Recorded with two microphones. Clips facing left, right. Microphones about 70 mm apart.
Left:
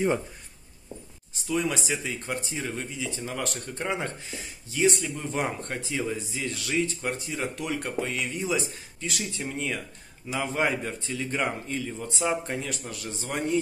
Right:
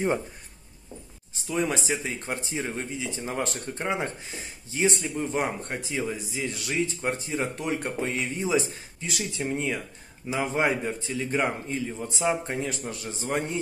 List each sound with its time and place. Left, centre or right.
1.5 s speech: right